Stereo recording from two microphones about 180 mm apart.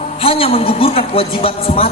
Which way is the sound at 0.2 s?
30° left (ahead or behind).